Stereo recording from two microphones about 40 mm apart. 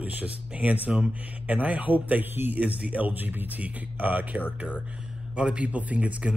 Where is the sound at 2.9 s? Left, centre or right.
Right.